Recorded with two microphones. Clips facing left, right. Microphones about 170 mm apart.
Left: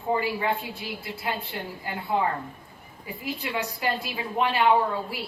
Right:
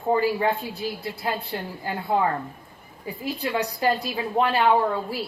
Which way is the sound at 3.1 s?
35° right (ahead or behind).